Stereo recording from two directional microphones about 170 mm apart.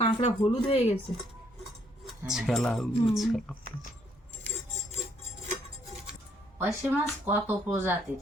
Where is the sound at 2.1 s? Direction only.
Centre (ahead or behind).